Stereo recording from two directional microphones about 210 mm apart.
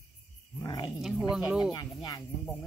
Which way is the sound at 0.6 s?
20° left (ahead or behind).